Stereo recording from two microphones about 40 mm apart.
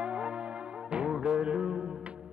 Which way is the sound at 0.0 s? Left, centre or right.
Right.